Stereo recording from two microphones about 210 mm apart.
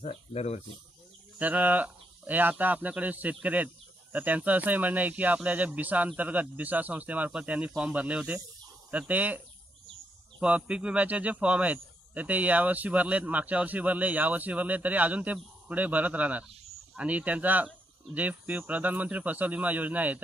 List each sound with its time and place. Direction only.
0.0 s speech: 30° left (ahead or behind)
1.4 s speech: 10° right (ahead or behind)
10.4 s speech: 5° right (ahead or behind)